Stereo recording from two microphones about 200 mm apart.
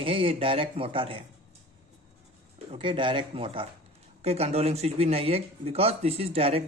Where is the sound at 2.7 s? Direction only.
25° right (ahead or behind).